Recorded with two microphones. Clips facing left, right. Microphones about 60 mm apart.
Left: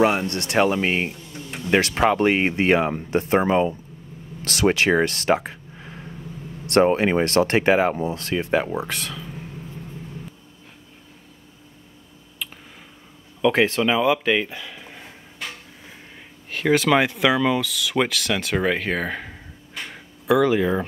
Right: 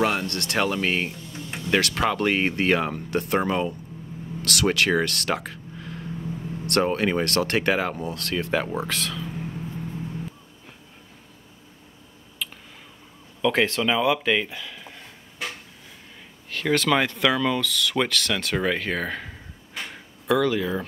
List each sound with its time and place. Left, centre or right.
0.0 s speech: centre
12.4 s a sound: centre
13.4 s speech: centre
16.4 s speech: centre
19.9 s a sound: centre
20.4 s speech: left